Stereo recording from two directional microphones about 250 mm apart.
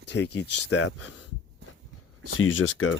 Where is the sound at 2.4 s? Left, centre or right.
Left.